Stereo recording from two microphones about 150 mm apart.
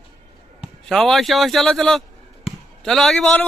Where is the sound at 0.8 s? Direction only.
Centre (ahead or behind).